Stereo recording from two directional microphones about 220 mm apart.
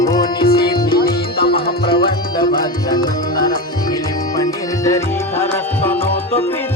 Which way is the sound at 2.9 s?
20° left (ahead or behind).